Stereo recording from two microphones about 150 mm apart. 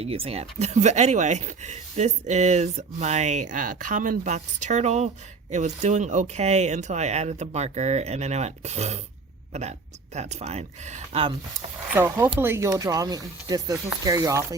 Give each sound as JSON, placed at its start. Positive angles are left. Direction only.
{"t": 0.0, "sound": "speech", "side_deg": -40}
{"t": 11.9, "sound": "speech", "side_deg": -15}